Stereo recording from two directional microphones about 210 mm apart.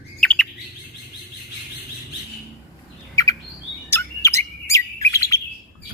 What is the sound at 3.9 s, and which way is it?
Bird, 10° left (ahead or behind).